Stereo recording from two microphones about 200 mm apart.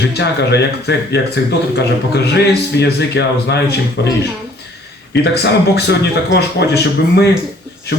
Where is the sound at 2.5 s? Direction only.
55° left (ahead or behind).